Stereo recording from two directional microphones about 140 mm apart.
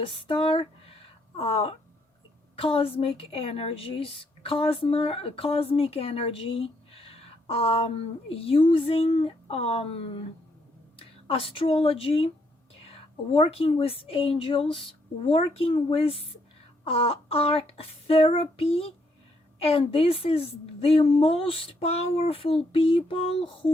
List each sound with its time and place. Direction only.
0.0 s a woman's voice: 40° left (ahead or behind)